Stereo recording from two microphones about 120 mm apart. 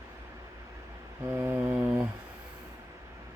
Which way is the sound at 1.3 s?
20° right (ahead or behind).